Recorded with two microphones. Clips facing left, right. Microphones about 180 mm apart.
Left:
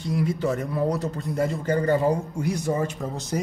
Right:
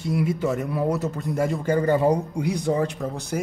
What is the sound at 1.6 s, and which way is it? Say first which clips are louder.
Speech: right 2 dB; 10° right (ahead or behind).